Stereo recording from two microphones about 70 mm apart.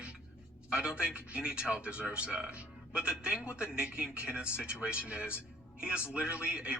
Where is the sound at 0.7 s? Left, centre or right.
Centre.